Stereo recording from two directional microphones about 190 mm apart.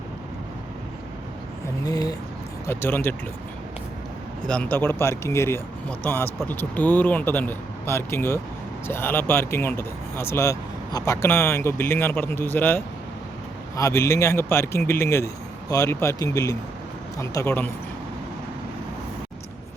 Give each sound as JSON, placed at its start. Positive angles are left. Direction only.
{"t": 1.8, "sound": "speech", "side_deg": 20}
{"t": 4.4, "sound": "speech", "side_deg": 5}